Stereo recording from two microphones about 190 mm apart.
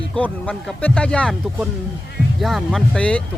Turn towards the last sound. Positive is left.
turn(degrees=5)  # may be behind; listen again after turning